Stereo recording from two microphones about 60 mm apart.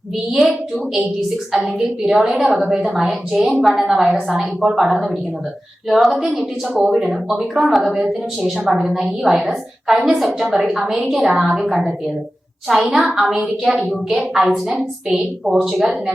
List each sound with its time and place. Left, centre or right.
0.3 s a woman's voice: centre
1.5 s a woman's voice: centre
14.4 s a woman's voice: centre
15.4 s a woman's voice: centre